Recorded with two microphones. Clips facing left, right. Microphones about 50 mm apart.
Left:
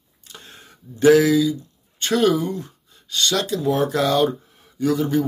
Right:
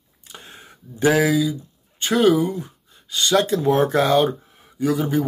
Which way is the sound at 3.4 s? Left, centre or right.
Right.